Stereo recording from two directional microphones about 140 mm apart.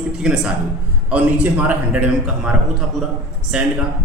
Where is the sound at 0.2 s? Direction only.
5° right (ahead or behind).